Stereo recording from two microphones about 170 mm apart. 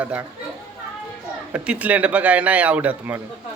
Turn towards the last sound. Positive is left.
turn(degrees=-10)  # may be behind; listen again after turning